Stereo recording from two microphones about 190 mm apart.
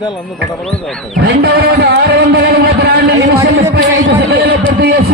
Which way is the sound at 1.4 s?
60° right (ahead or behind).